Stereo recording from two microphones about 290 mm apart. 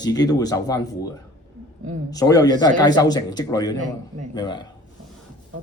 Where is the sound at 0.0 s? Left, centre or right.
Centre.